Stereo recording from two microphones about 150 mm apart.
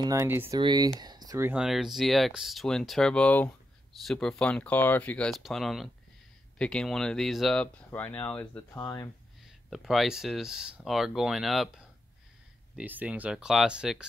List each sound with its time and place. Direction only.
0.0 s speech: 20° right (ahead or behind)
0.6 s speech: 30° right (ahead or behind)
1.4 s speech: 5° right (ahead or behind); by 9.1 s 20° left (ahead or behind)
9.7 s speech: centre (ahead or behind)